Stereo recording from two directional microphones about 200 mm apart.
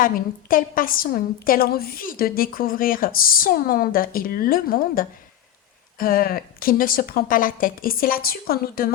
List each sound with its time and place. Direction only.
0.0 s a woman's voice: 45° left (ahead or behind)